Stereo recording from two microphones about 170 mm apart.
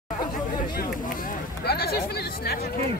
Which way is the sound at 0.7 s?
60° left (ahead or behind).